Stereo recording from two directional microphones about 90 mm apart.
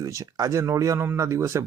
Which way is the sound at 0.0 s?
40° right (ahead or behind).